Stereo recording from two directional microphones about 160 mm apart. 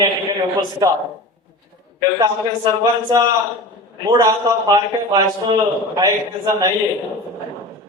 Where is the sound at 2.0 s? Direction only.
25° right (ahead or behind).